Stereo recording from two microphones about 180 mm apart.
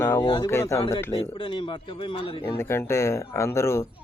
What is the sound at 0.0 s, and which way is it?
Speech, 15° left (ahead or behind).